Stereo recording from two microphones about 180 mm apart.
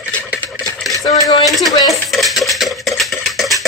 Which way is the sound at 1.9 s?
Centre (ahead or behind).